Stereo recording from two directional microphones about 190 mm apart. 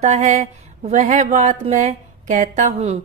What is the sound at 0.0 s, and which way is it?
Speech, 35° right (ahead or behind).